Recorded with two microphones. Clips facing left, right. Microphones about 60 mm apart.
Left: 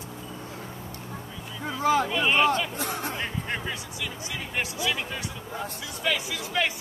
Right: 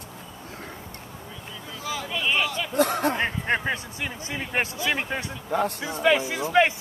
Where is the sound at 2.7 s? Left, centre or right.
Right.